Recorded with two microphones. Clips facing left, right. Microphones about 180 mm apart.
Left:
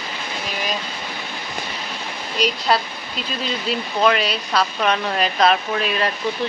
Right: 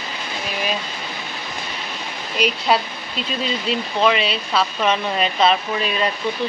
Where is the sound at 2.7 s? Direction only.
10° right (ahead or behind).